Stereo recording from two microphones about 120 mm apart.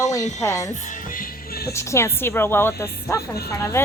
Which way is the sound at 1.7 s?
25° left (ahead or behind).